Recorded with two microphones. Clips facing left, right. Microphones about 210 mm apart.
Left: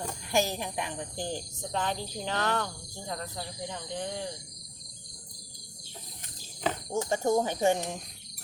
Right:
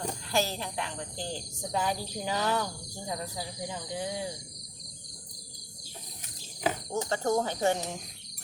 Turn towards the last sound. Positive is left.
turn(degrees=15)  # may be behind; listen again after turning